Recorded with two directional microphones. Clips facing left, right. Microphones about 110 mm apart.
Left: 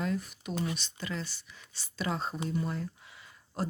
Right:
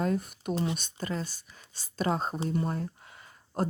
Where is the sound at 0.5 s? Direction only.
30° right (ahead or behind).